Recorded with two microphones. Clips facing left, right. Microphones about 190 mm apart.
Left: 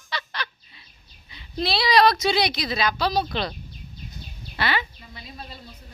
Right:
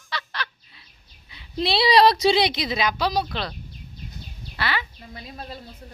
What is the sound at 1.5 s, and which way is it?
A woman's voice, 25° right (ahead or behind).